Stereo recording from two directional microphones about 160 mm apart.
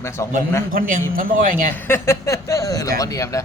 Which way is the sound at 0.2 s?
15° left (ahead or behind).